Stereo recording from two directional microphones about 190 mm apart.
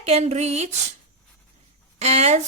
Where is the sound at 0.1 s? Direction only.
35° right (ahead or behind).